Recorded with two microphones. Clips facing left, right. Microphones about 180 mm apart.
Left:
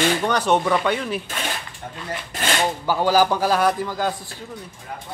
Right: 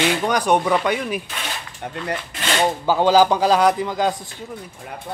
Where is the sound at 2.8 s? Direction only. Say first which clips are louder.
Right 3 dB; 20° right (ahead or behind).